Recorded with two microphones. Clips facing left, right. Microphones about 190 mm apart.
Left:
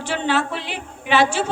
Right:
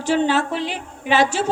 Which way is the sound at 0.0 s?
40° right (ahead or behind).